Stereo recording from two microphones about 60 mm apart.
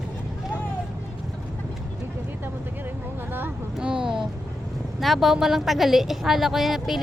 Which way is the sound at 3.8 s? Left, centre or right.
Centre.